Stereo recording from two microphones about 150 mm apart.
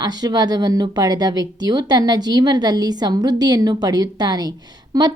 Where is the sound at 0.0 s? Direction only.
25° right (ahead or behind).